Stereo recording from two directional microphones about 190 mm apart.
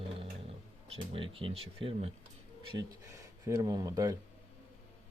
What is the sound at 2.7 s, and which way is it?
Speech, 15° right (ahead or behind).